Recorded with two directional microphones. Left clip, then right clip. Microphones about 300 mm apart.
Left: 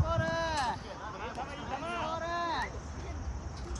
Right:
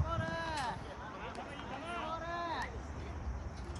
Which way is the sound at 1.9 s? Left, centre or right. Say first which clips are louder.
Left 5 dB; left.